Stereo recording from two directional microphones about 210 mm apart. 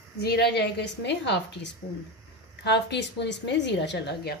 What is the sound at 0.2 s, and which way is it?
A woman's voice, 50° left (ahead or behind).